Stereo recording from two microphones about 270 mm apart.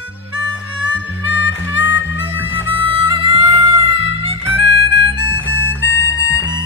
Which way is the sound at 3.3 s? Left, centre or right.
Centre.